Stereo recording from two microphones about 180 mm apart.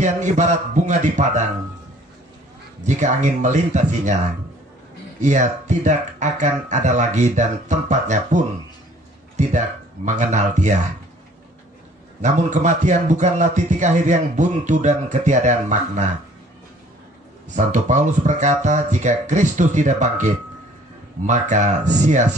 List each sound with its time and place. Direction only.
0.0 s speech: 40° right (ahead or behind)
2.8 s a man's voice: 40° right (ahead or behind)
5.2 s speech: 45° right (ahead or behind)
9.4 s speech: 40° right (ahead or behind)
12.2 s a man's voice: 45° right (ahead or behind)
17.6 s speech: 45° right (ahead or behind)
21.3 s a man's voice: 40° right (ahead or behind)